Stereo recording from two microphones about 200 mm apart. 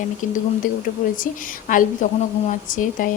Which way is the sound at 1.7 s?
40° left (ahead or behind).